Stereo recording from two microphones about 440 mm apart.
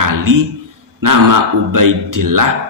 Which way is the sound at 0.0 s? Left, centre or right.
Right.